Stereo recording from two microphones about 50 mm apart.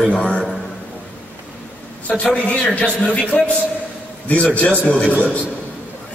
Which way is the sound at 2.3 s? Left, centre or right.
Left.